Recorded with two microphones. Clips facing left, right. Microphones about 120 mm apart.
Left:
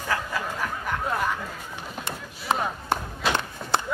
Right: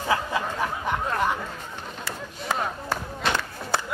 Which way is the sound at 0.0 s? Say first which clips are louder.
Right 3 dB; 20° right (ahead or behind).